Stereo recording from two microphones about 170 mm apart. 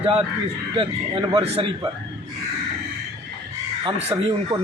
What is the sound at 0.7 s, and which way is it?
Speech, 25° right (ahead or behind).